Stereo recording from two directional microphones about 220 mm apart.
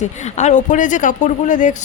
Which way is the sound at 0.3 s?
35° left (ahead or behind).